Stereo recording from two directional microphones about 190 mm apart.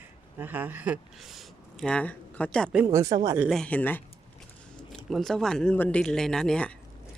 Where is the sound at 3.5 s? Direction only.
5° left (ahead or behind).